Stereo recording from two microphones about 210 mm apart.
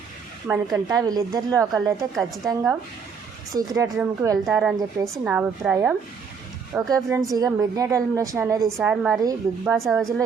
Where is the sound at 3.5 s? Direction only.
15° right (ahead or behind).